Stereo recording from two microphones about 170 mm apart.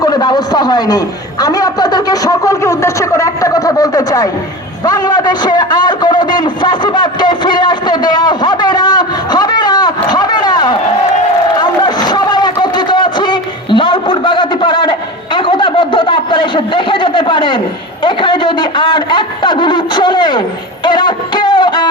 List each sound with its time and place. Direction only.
0.0 s a man's voice: 25° left (ahead or behind)
11.6 s a sound: 25° left (ahead or behind)
18.0 s a man's voice: 30° left (ahead or behind)
20.8 s music: 25° left (ahead or behind)